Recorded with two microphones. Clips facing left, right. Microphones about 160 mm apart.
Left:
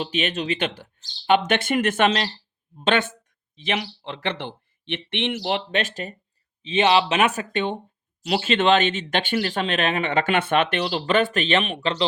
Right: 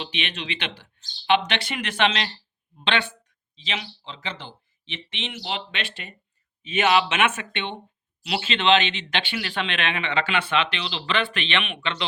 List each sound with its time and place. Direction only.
0.0 s speech: 45° left (ahead or behind)
6.6 s speech: 30° left (ahead or behind)